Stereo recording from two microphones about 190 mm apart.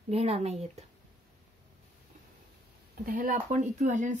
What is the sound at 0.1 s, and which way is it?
Speech, 35° right (ahead or behind).